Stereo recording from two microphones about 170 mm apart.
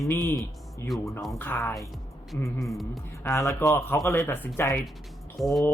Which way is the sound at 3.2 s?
15° left (ahead or behind).